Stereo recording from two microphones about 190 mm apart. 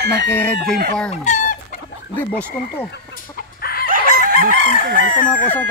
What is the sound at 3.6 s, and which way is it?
Chicken, 55° left (ahead or behind).